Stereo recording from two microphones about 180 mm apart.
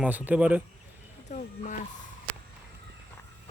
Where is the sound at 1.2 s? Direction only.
40° left (ahead or behind).